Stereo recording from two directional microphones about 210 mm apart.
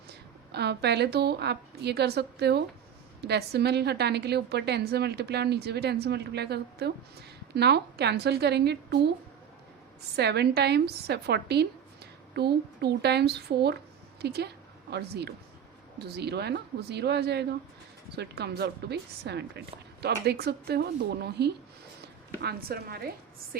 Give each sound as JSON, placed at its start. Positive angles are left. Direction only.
{"t": 0.1, "sound": "a woman's voice", "side_deg": -50}
{"t": 10.2, "sound": "a woman's voice", "side_deg": -50}